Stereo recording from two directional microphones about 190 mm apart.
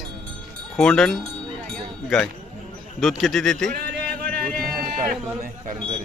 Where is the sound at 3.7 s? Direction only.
50° right (ahead or behind).